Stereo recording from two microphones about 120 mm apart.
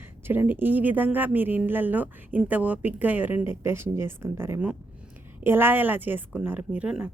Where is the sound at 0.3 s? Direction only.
15° right (ahead or behind).